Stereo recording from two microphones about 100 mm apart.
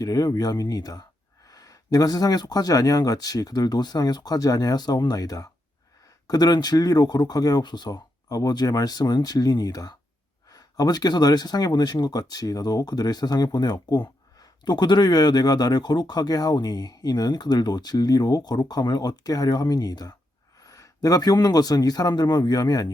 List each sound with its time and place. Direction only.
0.0 s speech: 40° left (ahead or behind)